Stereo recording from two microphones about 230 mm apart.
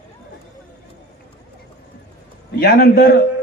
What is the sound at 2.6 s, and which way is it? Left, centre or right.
Speech, left.